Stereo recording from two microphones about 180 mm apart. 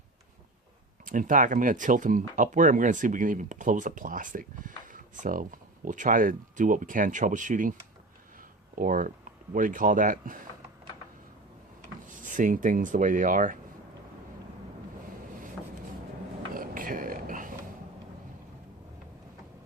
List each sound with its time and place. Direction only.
1.0 s speech: 45° right (ahead or behind)
12.0 s speech: 45° right (ahead or behind)
16.6 s a sound: 50° right (ahead or behind)